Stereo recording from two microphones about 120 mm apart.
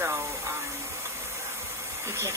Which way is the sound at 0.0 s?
20° right (ahead or behind).